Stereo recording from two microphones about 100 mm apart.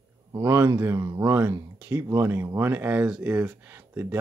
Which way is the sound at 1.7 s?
20° right (ahead or behind).